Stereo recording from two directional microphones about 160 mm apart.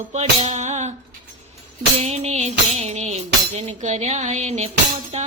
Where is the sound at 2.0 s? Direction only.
40° right (ahead or behind).